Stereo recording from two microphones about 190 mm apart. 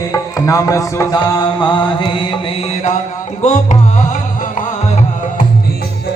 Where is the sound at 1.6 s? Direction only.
25° left (ahead or behind).